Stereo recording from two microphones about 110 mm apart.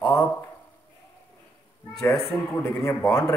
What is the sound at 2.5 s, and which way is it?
Speech, 20° left (ahead or behind).